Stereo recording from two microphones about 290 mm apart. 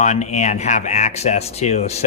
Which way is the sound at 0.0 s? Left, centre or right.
Left.